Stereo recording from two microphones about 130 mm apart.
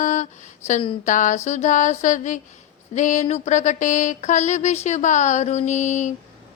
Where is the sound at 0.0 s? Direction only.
70° left (ahead or behind).